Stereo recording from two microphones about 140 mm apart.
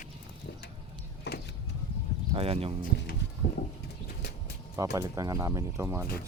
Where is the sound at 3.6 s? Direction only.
90° left.